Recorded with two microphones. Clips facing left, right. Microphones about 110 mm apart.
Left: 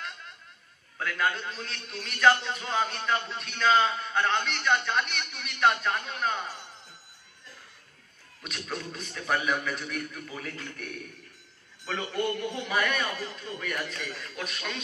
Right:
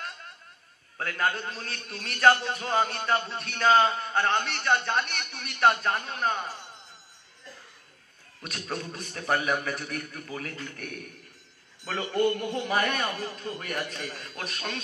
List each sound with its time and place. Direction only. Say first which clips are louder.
0.9 s a man's voice: right 1 dB; 35° right (ahead or behind)
8.4 s a man's voice: right 2 dB; 35° right (ahead or behind)
12.1 s a man's voice: right 6 dB; 40° right (ahead or behind)